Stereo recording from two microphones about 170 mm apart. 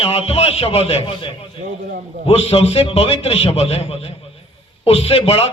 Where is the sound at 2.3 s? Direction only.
35° left (ahead or behind).